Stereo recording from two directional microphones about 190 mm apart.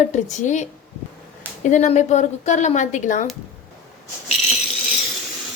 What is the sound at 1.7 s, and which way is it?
A woman's voice, 40° left (ahead or behind).